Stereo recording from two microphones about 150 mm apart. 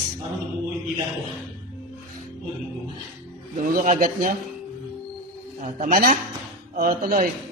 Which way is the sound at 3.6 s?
65° right (ahead or behind).